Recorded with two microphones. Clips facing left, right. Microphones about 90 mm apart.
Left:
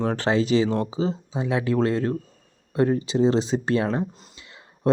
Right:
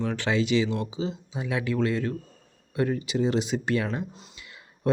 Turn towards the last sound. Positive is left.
turn(degrees=30)  # may be behind; listen again after turning